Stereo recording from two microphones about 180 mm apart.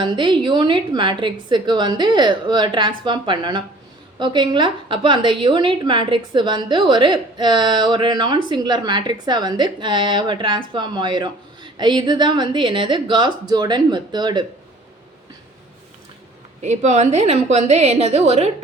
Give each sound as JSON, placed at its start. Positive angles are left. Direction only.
{"t": 0.0, "sound": "a woman's voice", "side_deg": -25}
{"t": 16.6, "sound": "a woman's voice", "side_deg": -40}